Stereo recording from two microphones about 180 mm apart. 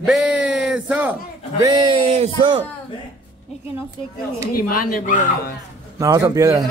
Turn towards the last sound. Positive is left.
turn(degrees=-20)  # may be behind; listen again after turning